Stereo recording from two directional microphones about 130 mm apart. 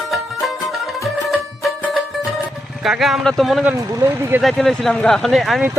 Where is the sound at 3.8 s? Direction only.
25° right (ahead or behind).